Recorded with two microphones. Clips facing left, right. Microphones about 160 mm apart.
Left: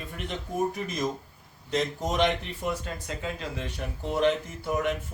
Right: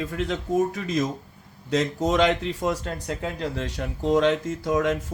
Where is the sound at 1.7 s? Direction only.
90° right.